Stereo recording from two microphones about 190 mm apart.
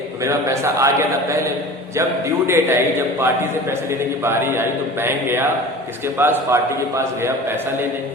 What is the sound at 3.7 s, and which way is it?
A man's voice, 15° right (ahead or behind).